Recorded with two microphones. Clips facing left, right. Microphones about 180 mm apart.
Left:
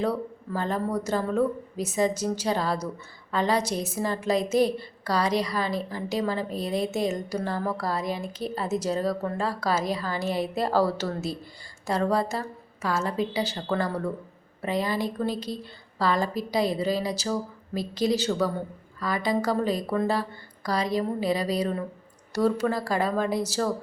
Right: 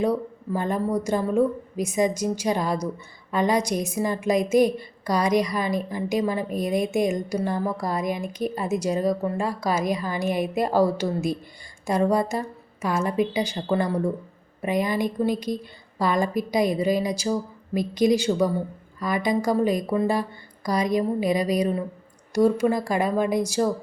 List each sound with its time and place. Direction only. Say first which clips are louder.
0.0 s a woman's voice: right 4 dB; 15° right (ahead or behind)